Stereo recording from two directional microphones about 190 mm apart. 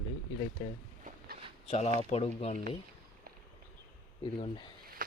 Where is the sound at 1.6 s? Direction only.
35° left (ahead or behind).